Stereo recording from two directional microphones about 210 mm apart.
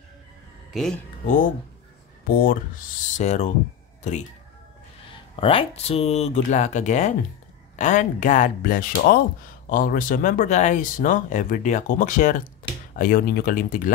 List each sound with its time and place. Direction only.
2.2 s speech: 45° left (ahead or behind)
5.3 s speech: 25° left (ahead or behind)